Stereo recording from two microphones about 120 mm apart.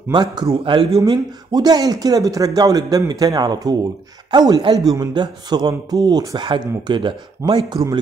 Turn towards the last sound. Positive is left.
turn(degrees=-35)  # may be behind; listen again after turning